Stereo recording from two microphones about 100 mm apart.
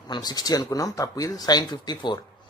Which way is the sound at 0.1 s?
45° left (ahead or behind).